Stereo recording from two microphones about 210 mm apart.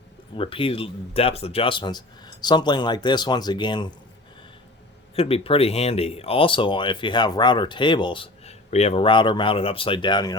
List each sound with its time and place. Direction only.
0.3 s speech: 25° left (ahead or behind)
5.1 s speech: 30° left (ahead or behind)